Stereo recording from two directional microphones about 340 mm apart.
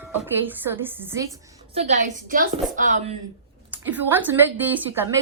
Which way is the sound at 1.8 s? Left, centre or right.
Right.